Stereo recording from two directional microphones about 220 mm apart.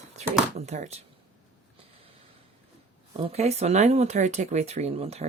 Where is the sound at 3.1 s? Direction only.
25° right (ahead or behind).